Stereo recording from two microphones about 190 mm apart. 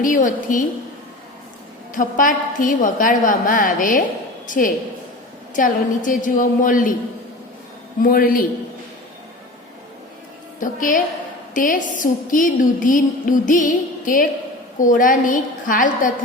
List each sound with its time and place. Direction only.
0.0 s a woman's voice: 45° left (ahead or behind)
1.9 s a woman's voice: 45° left (ahead or behind)
8.0 s a woman's voice: 50° left (ahead or behind)
10.6 s a woman's voice: 45° left (ahead or behind)